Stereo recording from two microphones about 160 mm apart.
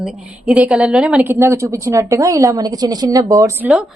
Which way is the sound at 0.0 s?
5° right (ahead or behind).